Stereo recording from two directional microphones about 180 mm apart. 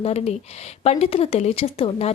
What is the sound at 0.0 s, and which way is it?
A woman's voice, 35° left (ahead or behind).